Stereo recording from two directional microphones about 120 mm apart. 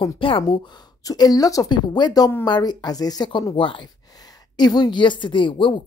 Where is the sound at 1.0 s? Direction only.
30° left (ahead or behind).